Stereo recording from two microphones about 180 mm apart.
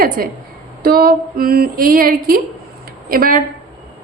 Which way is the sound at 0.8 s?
55° right (ahead or behind).